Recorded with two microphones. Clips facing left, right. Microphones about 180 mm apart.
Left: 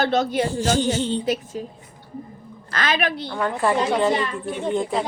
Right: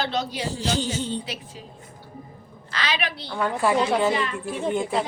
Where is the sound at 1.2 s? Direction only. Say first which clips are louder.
Left 12 dB; 45° left (ahead or behind).